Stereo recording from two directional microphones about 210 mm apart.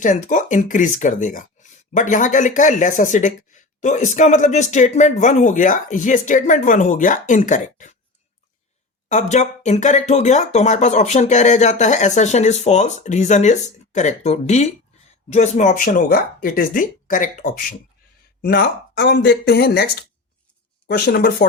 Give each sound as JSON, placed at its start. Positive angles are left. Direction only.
{"t": 0.0, "sound": "speech", "side_deg": 35}
{"t": 9.0, "sound": "speech", "side_deg": 35}
{"t": 18.4, "sound": "speech", "side_deg": 50}